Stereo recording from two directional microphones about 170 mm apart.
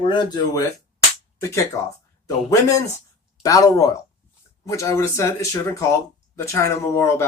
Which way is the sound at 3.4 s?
20° left (ahead or behind).